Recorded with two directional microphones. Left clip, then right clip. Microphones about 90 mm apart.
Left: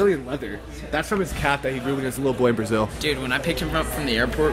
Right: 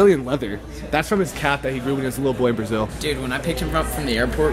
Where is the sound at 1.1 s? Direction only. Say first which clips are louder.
Right 2 dB; 5° right (ahead or behind).